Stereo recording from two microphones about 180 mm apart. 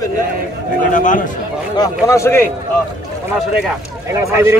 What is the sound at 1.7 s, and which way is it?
Speech, 20° left (ahead or behind).